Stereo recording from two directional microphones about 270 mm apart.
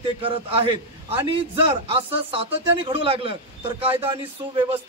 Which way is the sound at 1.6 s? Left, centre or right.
Right.